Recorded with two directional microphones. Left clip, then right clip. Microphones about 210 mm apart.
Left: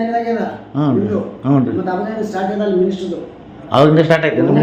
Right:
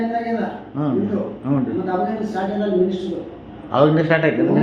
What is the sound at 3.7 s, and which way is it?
Speech, 55° left (ahead or behind).